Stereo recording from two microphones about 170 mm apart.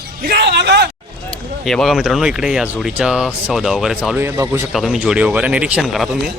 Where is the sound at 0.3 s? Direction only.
85° right.